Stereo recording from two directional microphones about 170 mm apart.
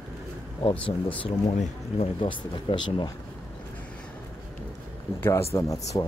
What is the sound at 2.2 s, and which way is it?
Speech, 30° left (ahead or behind).